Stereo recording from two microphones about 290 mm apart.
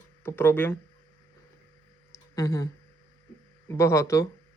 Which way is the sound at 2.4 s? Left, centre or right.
Centre.